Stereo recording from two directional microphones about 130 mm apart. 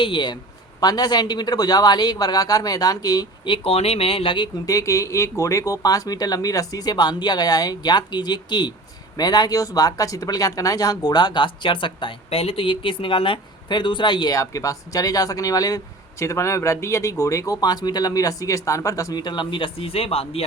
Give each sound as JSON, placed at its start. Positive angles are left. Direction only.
{"t": 0.0, "sound": "speech", "side_deg": 35}
{"t": 4.6, "sound": "speech", "side_deg": 25}